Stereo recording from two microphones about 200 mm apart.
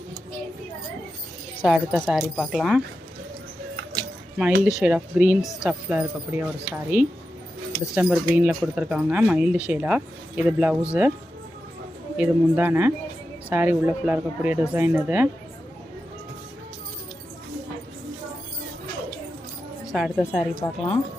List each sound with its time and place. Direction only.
1.6 s speech: 5° right (ahead or behind)
4.4 s speech: 5° right (ahead or behind)
12.1 s speech: 10° right (ahead or behind)
19.9 s speech: centre (ahead or behind)
20.6 s speech: 30° left (ahead or behind)